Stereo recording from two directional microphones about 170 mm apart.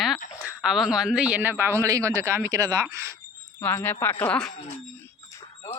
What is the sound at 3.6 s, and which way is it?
Speech, 10° left (ahead or behind).